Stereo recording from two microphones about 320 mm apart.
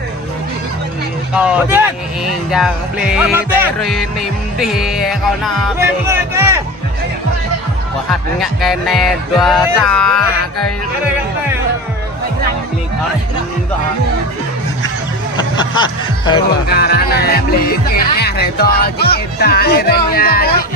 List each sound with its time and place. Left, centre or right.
1.3 s music: centre
3.1 s music: centre
6.1 s speech: centre
8.1 s music: centre
15.5 s speech: centre
16.6 s speech: left